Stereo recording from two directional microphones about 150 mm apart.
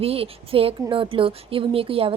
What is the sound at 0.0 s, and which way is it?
Speech, 40° right (ahead or behind).